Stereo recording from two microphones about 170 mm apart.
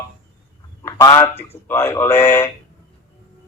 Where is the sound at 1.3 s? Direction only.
35° left (ahead or behind).